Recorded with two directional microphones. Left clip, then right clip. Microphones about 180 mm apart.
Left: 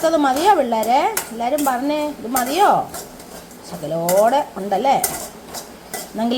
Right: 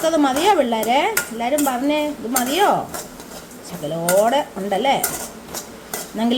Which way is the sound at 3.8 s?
5° left (ahead or behind).